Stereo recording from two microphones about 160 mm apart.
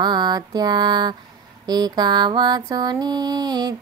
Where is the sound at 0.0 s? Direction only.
25° right (ahead or behind).